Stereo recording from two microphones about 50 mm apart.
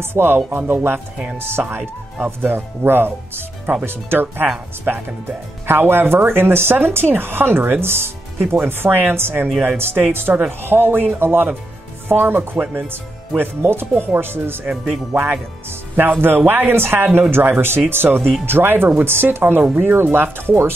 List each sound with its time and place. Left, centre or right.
0.0 s speech: right
2.2 s speech: right
16.0 s speech: right